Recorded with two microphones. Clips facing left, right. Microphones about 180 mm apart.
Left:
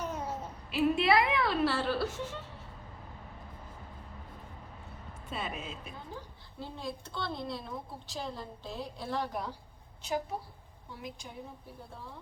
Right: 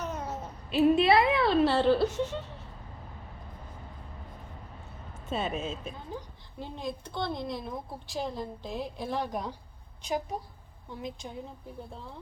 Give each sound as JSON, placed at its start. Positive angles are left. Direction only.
{"t": 0.0, "sound": "a sound", "side_deg": 10}
{"t": 0.7, "sound": "a woman's voice", "side_deg": -20}
{"t": 5.3, "sound": "a woman's voice", "side_deg": -25}